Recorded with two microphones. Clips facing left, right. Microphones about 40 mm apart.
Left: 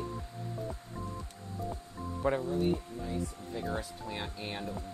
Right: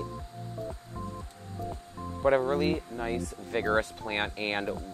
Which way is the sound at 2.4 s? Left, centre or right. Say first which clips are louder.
Right 4 dB; right.